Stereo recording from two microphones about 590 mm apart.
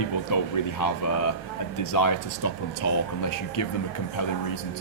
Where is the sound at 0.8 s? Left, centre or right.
Left.